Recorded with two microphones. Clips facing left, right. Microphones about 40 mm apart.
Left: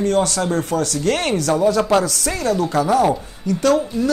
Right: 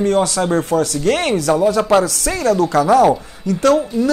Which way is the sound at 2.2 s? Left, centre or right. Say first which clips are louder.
Right 4 dB; right.